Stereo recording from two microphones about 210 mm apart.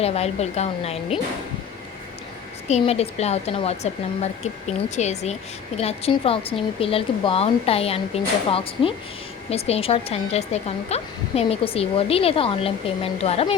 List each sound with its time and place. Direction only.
0.0 s speech: 30° left (ahead or behind)
2.6 s speech: 30° left (ahead or behind)